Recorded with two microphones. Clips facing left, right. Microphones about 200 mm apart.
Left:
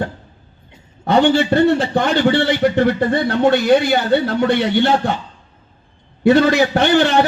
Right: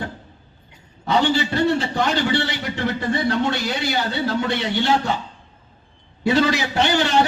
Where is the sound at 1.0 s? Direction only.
55° left (ahead or behind).